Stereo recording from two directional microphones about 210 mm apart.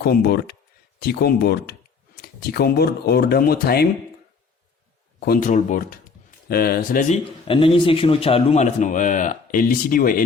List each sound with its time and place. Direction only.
0.0 s speech: 50° left (ahead or behind)
5.2 s a man's voice: 40° left (ahead or behind)
7.4 s a man's voice: 25° left (ahead or behind); by 10.2 s 45° left (ahead or behind)